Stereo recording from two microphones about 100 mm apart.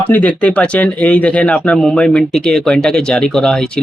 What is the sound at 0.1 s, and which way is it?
Speech, 15° left (ahead or behind).